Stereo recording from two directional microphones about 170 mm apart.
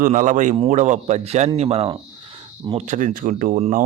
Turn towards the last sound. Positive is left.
turn(degrees=-50)  # may be behind; listen again after turning